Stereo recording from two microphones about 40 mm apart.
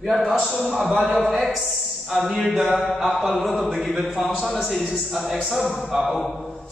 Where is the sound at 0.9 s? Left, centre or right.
Right.